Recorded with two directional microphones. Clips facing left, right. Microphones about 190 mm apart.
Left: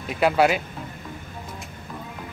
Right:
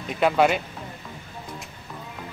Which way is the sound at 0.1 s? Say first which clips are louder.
Left 1 dB; 5° left (ahead or behind).